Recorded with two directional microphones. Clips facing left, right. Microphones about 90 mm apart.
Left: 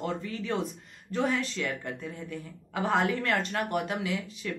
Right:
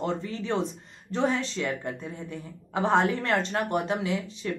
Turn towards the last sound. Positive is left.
turn(degrees=-25)  # may be behind; listen again after turning